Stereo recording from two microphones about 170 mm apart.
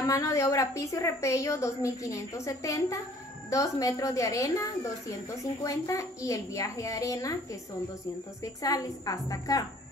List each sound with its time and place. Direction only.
0.0 s a woman's voice: 20° left (ahead or behind)
8.6 s a child's voice: 20° left (ahead or behind)